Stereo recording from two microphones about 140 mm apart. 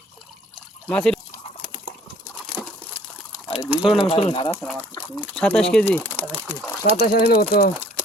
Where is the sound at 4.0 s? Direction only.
45° left (ahead or behind).